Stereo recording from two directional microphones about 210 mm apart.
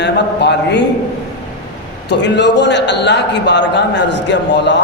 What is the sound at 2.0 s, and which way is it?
A man's voice, 55° left (ahead or behind).